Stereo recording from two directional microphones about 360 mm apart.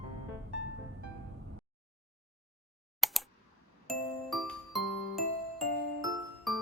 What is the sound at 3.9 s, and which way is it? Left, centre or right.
Music, centre.